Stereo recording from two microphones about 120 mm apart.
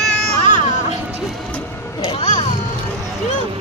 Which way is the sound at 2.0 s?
60° left (ahead or behind).